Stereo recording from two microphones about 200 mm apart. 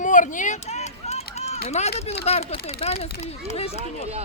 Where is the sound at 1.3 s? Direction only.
35° left (ahead or behind).